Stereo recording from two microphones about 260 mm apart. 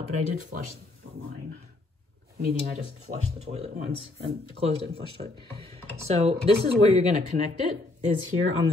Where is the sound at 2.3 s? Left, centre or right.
Right.